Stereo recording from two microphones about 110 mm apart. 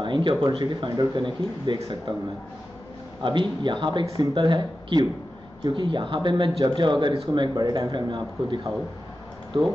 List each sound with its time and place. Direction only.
0.0 s speech: 45° right (ahead or behind)
3.2 s speech: 45° right (ahead or behind)